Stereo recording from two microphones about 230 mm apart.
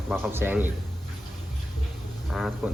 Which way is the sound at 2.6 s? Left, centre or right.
Centre.